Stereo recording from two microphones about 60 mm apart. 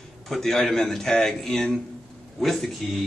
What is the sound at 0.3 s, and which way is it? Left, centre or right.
Speech, centre.